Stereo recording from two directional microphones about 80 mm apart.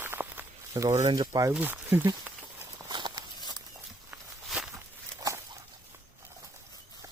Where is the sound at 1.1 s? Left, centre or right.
Right.